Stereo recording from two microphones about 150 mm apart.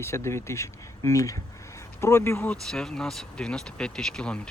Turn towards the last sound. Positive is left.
turn(degrees=5)  # may be behind; listen again after turning